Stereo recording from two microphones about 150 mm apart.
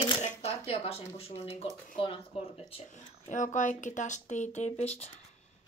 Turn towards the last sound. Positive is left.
turn(degrees=45)  # may be behind; listen again after turning